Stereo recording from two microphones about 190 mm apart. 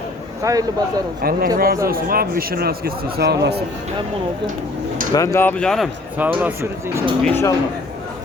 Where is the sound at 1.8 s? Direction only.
50° right (ahead or behind).